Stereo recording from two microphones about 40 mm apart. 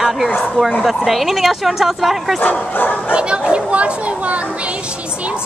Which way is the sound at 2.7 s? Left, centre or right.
Left.